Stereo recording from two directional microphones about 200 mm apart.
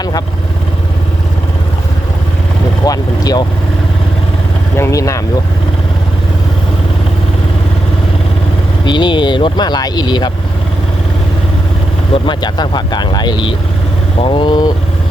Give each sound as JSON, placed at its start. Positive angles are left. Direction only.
{"t": 2.8, "sound": "speech", "side_deg": 20}
{"t": 4.8, "sound": "speech", "side_deg": 15}
{"t": 8.9, "sound": "speech", "side_deg": 25}
{"t": 12.1, "sound": "speech", "side_deg": 25}